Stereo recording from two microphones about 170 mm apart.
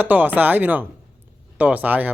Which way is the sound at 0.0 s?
10° right (ahead or behind).